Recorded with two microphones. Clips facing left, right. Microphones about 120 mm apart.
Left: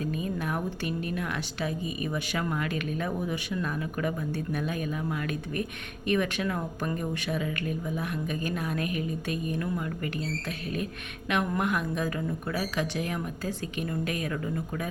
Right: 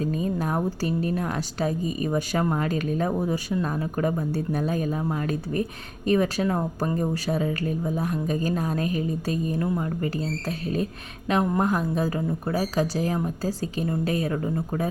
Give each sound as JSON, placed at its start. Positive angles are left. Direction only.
{"t": 0.0, "sound": "a woman's voice", "side_deg": -35}
{"t": 11.3, "sound": "a woman's voice", "side_deg": -30}